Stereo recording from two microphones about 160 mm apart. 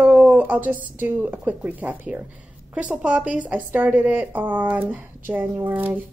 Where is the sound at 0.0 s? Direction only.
10° right (ahead or behind).